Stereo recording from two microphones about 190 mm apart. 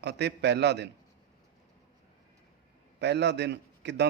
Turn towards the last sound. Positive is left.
turn(degrees=-65)  # may be behind; listen again after turning